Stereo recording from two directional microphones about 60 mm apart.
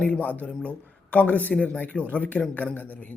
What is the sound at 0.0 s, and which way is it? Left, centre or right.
A man's voice, left.